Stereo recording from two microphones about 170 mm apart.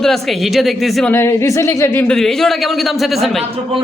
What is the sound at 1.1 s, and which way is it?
Speech, 15° left (ahead or behind).